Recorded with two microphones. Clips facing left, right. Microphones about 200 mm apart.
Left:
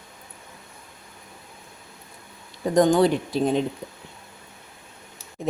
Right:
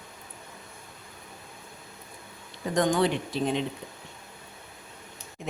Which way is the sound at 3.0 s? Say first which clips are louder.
Left 5 dB; 40° left (ahead or behind).